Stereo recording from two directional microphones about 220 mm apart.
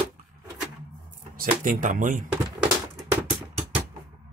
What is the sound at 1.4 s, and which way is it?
Speech, 40° right (ahead or behind).